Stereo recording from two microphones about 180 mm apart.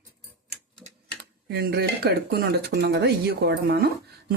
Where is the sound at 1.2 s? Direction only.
60° right (ahead or behind).